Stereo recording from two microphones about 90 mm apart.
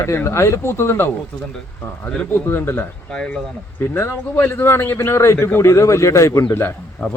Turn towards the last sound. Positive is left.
turn(degrees=35)  # may be behind; listen again after turning